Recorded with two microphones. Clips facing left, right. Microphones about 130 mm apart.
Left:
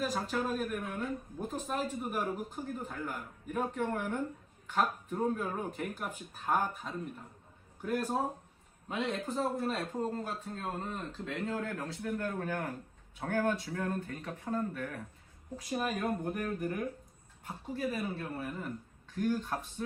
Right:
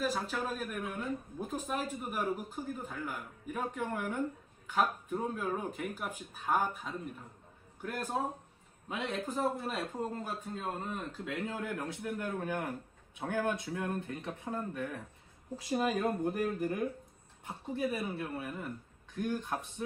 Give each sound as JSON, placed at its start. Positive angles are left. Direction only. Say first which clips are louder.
{"t": 0.0, "sound": "speech", "louder": "left 1 dB", "side_deg": 0}
{"t": 7.8, "sound": "speech", "louder": "left 3 dB", "side_deg": 5}
{"t": 9.2, "sound": "a man's voice", "louder": "left 1 dB", "side_deg": -10}
{"t": 17.4, "sound": "a man's voice", "louder": "right 1 dB", "side_deg": -20}